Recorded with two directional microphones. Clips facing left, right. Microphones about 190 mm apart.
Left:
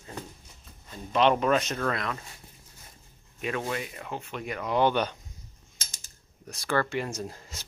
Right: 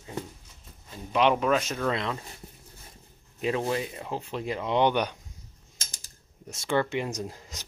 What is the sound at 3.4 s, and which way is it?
Speech, 25° right (ahead or behind).